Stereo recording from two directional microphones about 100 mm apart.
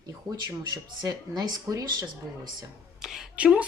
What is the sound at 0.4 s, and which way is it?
Speech, 45° right (ahead or behind).